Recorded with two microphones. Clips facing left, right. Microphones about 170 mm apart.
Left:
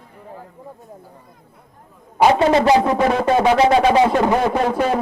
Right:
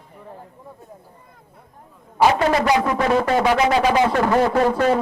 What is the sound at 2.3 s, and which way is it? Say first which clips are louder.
Speech: left 4 dB; 25° left (ahead or behind).